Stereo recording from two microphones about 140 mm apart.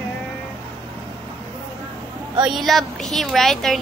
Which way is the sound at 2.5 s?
Centre (ahead or behind).